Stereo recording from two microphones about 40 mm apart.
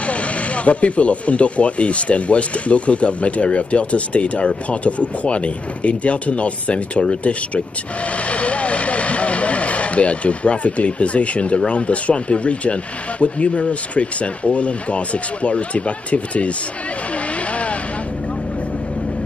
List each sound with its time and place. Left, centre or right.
0.0 s speech: left
17.5 s vehicle: left